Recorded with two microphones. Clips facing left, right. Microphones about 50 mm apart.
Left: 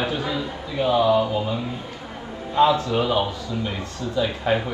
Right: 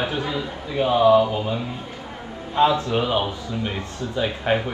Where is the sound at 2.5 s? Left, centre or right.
Right.